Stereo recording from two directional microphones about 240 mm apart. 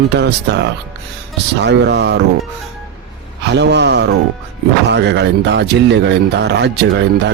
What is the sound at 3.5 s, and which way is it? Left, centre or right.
Speech, right.